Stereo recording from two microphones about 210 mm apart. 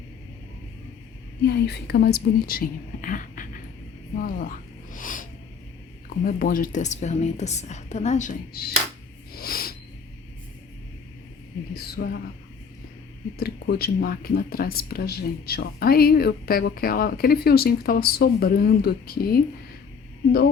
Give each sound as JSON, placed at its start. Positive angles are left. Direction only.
{"t": 1.5, "sound": "speech", "side_deg": 50}
{"t": 4.2, "sound": "a sound", "side_deg": 40}
{"t": 6.2, "sound": "a woman's voice", "side_deg": 40}
{"t": 9.3, "sound": "a sound", "side_deg": 45}
{"t": 11.7, "sound": "speech", "side_deg": 45}
{"t": 13.4, "sound": "speech", "side_deg": 50}